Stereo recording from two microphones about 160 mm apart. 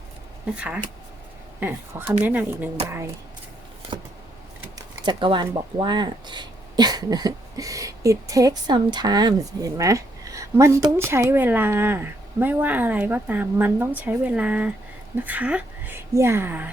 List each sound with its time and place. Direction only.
0.5 s speech: 10° right (ahead or behind)
5.0 s speech: 30° right (ahead or behind); by 16.6 s 15° right (ahead or behind)